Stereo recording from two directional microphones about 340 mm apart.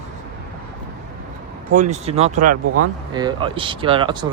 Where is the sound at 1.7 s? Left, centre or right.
Right.